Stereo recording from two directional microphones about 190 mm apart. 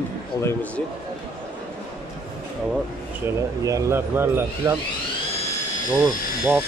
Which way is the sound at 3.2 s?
15° right (ahead or behind).